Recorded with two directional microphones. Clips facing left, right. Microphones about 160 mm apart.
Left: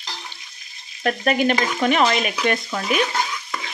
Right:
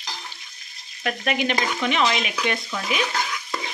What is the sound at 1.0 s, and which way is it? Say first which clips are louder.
Speech: left 5 dB; 40° left (ahead or behind).